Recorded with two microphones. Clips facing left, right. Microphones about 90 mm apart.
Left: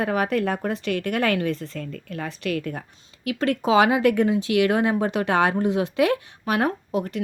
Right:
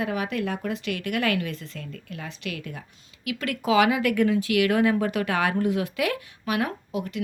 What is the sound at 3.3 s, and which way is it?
Speech, 35° left (ahead or behind).